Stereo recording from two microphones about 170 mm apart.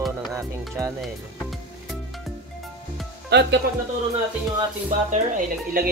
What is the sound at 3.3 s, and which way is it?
Speech, 85° right.